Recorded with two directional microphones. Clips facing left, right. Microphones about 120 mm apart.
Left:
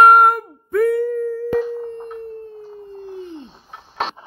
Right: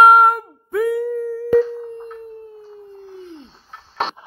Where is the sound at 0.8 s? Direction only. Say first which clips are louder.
Left 2 dB; 5° right (ahead or behind).